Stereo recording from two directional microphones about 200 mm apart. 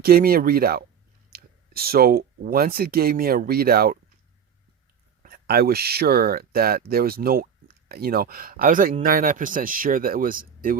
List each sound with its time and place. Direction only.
0.0 s speech: 50° right (ahead or behind)
5.2 s speech: 50° right (ahead or behind)